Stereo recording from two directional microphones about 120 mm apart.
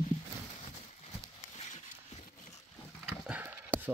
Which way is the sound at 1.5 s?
70° left (ahead or behind).